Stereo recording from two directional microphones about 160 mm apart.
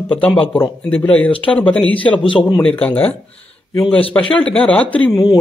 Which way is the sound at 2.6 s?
10° left (ahead or behind).